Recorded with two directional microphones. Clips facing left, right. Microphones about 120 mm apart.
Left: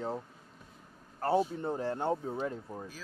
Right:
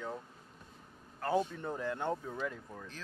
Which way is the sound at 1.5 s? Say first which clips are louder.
Left 4 dB; 30° left (ahead or behind).